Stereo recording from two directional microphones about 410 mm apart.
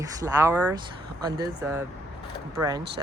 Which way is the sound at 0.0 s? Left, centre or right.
Centre.